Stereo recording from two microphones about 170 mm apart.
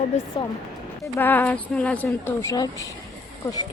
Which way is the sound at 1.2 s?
10° left (ahead or behind).